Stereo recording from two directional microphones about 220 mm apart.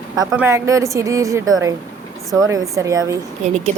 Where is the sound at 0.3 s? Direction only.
10° right (ahead or behind).